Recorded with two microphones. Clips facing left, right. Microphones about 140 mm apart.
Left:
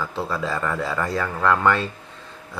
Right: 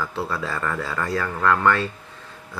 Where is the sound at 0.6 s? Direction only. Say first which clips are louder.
Left 2 dB; 5° left (ahead or behind).